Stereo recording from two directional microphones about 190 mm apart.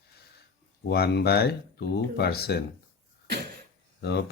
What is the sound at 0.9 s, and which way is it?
Speech, 55° left (ahead or behind).